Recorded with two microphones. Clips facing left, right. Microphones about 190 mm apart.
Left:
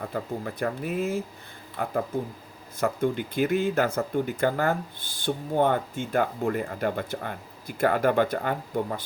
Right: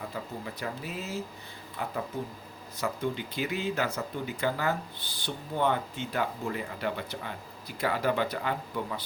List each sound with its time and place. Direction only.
0.1 s speech: 50° left (ahead or behind)